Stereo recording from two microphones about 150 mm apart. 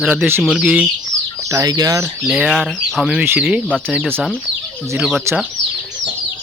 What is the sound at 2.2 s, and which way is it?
Speech, 5° right (ahead or behind).